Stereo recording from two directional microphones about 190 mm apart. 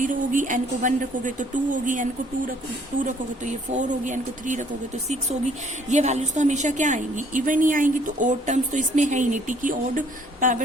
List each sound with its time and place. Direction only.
0.0 s a woman's voice: 45° right (ahead or behind)